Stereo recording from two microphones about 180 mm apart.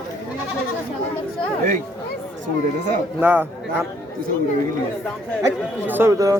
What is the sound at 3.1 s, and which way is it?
Speech, 10° right (ahead or behind).